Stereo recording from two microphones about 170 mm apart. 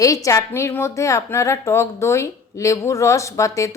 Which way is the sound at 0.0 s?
20° left (ahead or behind).